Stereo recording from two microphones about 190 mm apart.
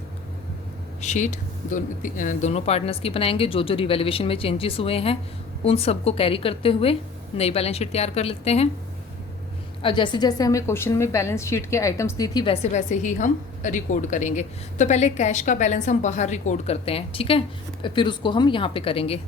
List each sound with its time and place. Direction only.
1.0 s a woman's voice: 40° left (ahead or behind)
9.8 s a woman's voice: 25° left (ahead or behind)
12.7 s a woman's voice: 40° left (ahead or behind)